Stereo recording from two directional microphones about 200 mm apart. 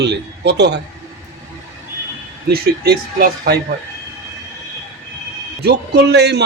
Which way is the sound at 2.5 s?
50° right (ahead or behind).